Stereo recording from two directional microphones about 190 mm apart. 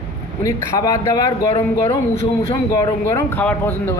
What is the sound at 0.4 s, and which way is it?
A man's voice, 20° left (ahead or behind).